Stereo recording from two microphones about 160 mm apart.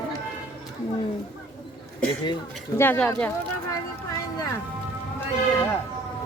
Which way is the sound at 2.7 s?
10° left (ahead or behind).